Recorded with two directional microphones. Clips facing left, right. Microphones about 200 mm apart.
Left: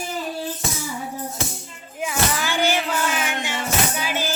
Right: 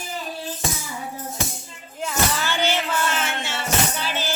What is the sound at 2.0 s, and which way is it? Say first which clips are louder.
Music: left 1 dB; 10° left (ahead or behind).